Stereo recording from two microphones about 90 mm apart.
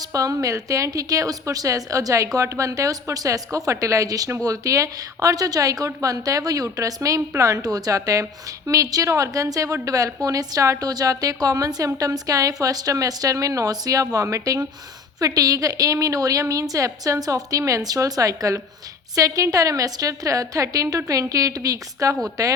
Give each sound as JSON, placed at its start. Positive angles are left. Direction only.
{"t": 0.0, "sound": "a woman's voice", "side_deg": -40}